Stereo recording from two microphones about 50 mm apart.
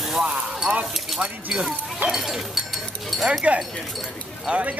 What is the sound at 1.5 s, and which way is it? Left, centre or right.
Speech, centre.